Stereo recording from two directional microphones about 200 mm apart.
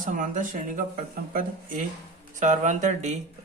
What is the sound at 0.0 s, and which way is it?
Speech, 40° right (ahead or behind).